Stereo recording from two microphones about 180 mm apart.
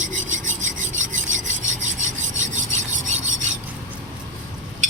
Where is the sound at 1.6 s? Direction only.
45° right (ahead or behind).